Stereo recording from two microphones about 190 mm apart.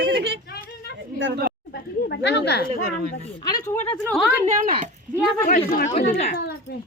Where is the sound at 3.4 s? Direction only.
20° left (ahead or behind).